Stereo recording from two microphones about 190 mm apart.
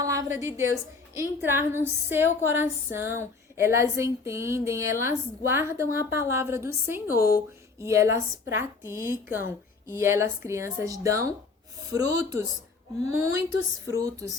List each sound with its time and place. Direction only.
0.0 s a woman's voice: 15° right (ahead or behind)
7.2 s speech: 15° left (ahead or behind)
7.8 s a woman's voice: 15° right (ahead or behind)
13.8 s a woman's voice: 15° right (ahead or behind)